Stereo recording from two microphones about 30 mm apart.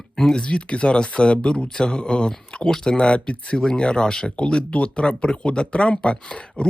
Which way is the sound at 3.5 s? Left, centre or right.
Centre.